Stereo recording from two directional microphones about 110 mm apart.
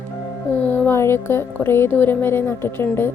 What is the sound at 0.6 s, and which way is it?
Speech, 20° left (ahead or behind).